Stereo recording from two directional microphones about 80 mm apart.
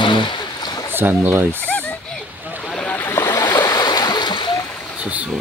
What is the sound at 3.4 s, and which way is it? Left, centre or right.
Stream, left.